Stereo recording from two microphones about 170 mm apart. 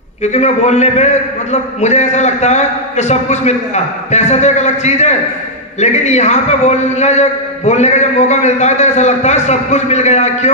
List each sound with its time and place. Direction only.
0.2 s a man's voice: 40° left (ahead or behind)